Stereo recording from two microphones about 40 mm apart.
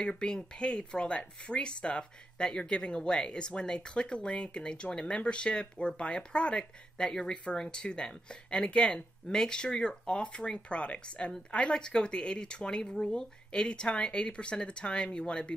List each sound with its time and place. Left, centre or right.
0.2 s speech: left